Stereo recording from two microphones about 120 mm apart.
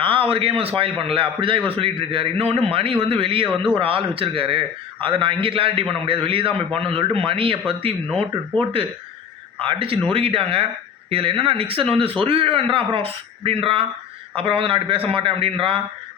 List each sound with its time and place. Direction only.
0.0 s a man's voice: 45° right (ahead or behind)